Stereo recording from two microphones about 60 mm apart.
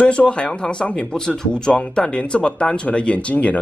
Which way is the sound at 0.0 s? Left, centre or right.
Centre.